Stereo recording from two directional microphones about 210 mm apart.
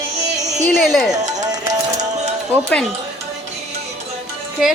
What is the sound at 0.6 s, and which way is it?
Speech, 5° left (ahead or behind).